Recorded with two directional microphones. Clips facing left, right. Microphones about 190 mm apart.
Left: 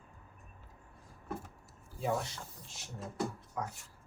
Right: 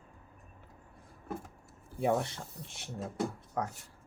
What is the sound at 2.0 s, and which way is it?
Speech, 60° right (ahead or behind).